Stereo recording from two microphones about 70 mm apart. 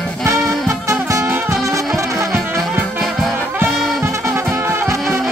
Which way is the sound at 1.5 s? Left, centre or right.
Right.